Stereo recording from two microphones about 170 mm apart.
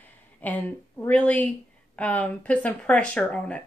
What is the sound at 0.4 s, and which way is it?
Speech, 10° left (ahead or behind).